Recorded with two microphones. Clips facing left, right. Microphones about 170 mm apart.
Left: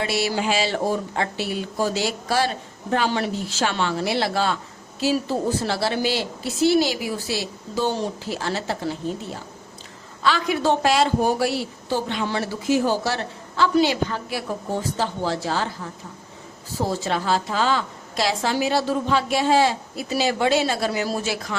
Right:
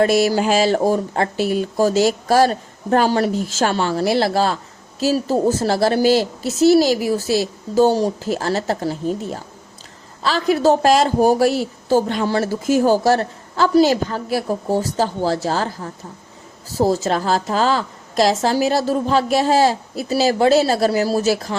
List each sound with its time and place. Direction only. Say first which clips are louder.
0.0 s a woman's voice: right 8 dB; 45° right (ahead or behind)